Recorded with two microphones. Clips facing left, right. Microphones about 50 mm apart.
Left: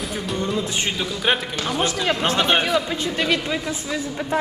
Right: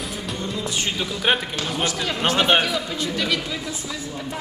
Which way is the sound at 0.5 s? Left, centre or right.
Left.